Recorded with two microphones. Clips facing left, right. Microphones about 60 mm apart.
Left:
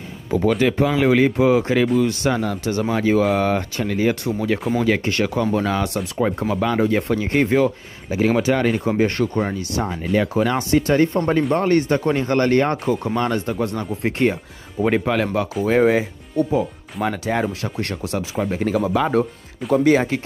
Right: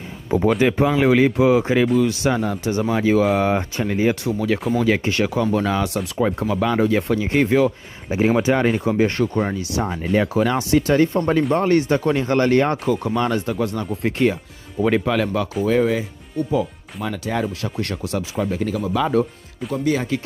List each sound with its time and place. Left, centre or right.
0.5 s speech: centre
1.9 s speech: centre
2.2 s speech: centre
2.8 s speech: centre
3.4 s speech: centre
8.1 s speech: right
8.7 s speech: centre
9.0 s speech: centre
10.3 s speech: centre
15.6 s speech: left
18.0 s speech: centre
18.4 s speech: left
19.7 s speech: left